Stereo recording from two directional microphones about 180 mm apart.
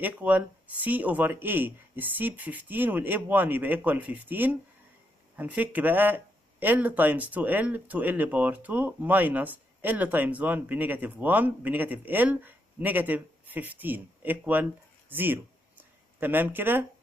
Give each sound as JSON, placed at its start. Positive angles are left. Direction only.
{"t": 0.0, "sound": "speech", "side_deg": -10}